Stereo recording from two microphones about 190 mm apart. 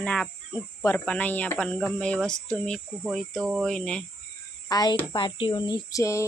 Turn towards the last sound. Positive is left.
turn(degrees=15)  # may be behind; listen again after turning